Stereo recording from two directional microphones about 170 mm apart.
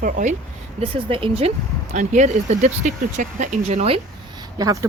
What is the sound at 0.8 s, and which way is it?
Speech, 30° right (ahead or behind).